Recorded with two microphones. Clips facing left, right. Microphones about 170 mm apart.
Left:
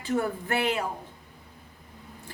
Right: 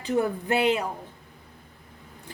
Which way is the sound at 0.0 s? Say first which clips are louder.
Right 3 dB; 20° right (ahead or behind).